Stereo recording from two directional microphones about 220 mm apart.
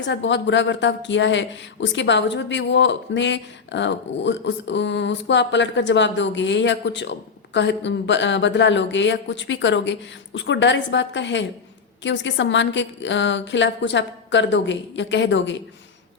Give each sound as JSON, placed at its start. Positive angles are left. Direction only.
{"t": 0.0, "sound": "speech", "side_deg": 55}